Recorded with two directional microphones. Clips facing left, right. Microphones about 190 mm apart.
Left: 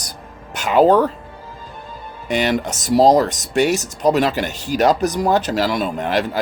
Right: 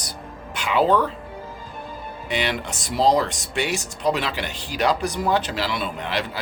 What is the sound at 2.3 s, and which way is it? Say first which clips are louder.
Speech: left 7 dB; 45° left (ahead or behind).